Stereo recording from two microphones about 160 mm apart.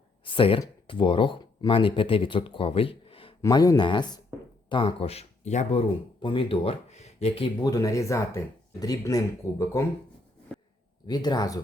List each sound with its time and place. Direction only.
0.3 s speech: 35° left (ahead or behind)
3.4 s speech: 20° left (ahead or behind); by 5.8 s 45° left (ahead or behind)
6.2 s speech: 35° left (ahead or behind)
11.0 s speech: 25° left (ahead or behind)